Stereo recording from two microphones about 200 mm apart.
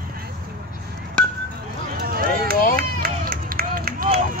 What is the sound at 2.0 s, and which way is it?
Run, 50° right (ahead or behind).